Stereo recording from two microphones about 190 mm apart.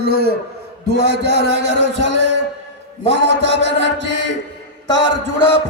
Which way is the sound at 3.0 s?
65° right (ahead or behind).